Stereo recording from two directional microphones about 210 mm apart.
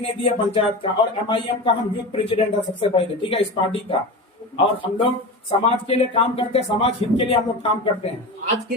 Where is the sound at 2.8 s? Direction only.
25° left (ahead or behind).